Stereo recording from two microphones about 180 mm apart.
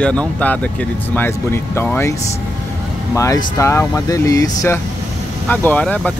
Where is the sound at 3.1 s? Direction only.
15° left (ahead or behind).